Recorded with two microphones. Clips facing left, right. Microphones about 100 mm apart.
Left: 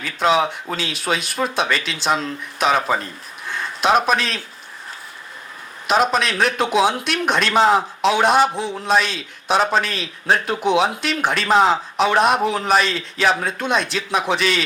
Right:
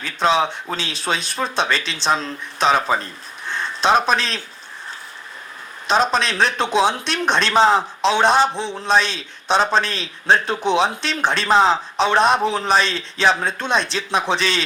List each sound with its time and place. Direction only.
0.0 s speech: 30° right (ahead or behind)
3.4 s a sound: 30° right (ahead or behind)
4.0 s speech: 30° right (ahead or behind)
5.9 s speech: 30° right (ahead or behind)